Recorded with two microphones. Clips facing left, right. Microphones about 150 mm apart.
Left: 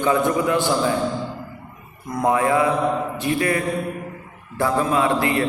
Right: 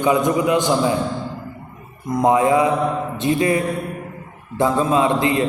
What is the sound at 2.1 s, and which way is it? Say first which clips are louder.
A man's voice: right 4 dB; 20° right (ahead or behind).